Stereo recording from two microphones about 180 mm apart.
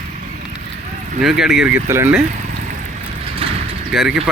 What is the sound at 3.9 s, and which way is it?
Speech, centre (ahead or behind).